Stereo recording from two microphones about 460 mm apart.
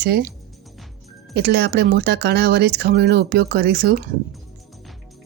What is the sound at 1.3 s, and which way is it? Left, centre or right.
Speech, right.